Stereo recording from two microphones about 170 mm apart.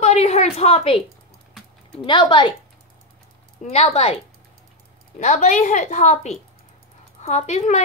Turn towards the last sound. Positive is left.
turn(degrees=40)  # may be behind; listen again after turning